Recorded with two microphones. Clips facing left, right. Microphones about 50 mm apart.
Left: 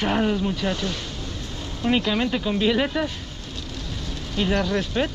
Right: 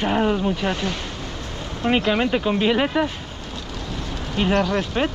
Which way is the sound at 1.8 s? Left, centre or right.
Right.